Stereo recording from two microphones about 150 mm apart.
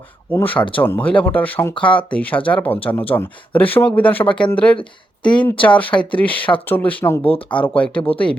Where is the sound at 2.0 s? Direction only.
10° left (ahead or behind).